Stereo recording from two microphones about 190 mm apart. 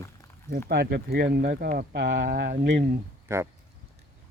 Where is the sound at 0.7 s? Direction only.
60° right (ahead or behind).